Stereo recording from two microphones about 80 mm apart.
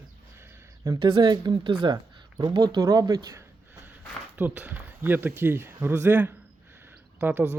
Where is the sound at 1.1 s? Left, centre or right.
Right.